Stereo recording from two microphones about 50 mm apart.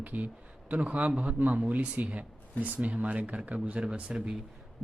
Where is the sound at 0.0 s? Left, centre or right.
Right.